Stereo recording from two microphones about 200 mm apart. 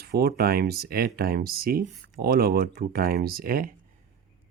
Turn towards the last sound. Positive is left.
turn(degrees=-45)  # may be behind; listen again after turning